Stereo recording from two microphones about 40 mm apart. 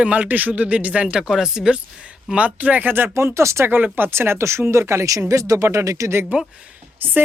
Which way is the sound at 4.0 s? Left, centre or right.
Right.